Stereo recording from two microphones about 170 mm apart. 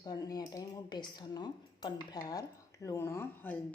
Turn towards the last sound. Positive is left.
turn(degrees=15)  # may be behind; listen again after turning